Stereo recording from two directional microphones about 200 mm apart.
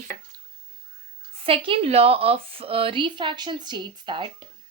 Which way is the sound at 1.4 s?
30° right (ahead or behind).